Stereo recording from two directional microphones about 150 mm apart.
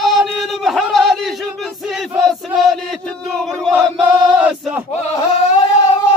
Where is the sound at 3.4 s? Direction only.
Centre (ahead or behind).